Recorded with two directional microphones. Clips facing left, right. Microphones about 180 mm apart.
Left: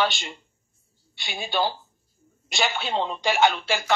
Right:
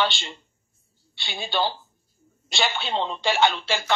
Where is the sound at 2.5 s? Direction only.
30° right (ahead or behind).